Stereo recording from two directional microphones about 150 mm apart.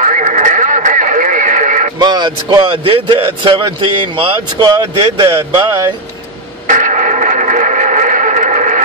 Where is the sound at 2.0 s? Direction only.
30° right (ahead or behind).